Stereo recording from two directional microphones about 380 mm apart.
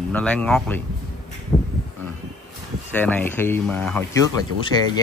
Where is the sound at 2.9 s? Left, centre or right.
Centre.